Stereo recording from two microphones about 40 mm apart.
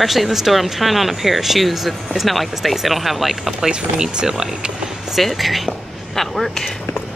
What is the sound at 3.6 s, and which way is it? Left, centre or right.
Speech, centre.